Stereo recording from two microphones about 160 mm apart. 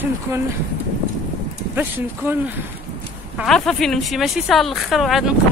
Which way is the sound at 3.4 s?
Centre (ahead or behind).